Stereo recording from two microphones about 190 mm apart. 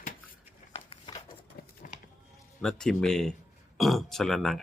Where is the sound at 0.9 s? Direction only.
25° left (ahead or behind).